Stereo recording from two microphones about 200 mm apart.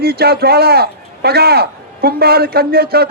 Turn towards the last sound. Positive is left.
turn(degrees=-50)  # may be behind; listen again after turning